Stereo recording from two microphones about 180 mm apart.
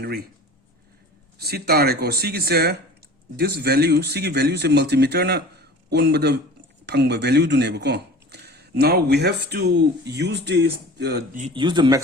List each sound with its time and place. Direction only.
0.0 s speech: 60° right (ahead or behind)
1.4 s speech: 60° right (ahead or behind)
11.5 s a man's voice: 25° right (ahead or behind)